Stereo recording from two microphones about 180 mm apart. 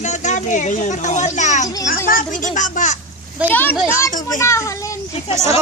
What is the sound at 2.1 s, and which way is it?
Speech, 50° left (ahead or behind).